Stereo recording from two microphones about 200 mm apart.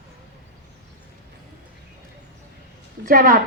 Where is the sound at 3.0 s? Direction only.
45° right (ahead or behind).